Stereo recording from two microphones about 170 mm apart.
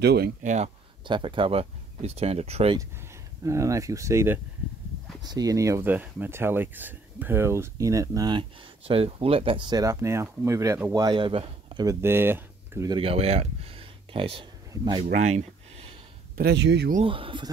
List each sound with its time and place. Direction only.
0.0 s speech: 70° right (ahead or behind)
0.4 s speech: 45° right (ahead or behind)
1.0 s speech: 30° right (ahead or behind)
3.4 s speech: 20° right (ahead or behind)
11.8 s speech: 15° right (ahead or behind)
12.9 s speech: 35° right (ahead or behind)
15.1 s a sound: 40° right (ahead or behind)
16.3 s speech: 80° right
17.0 s speech: 30° right (ahead or behind)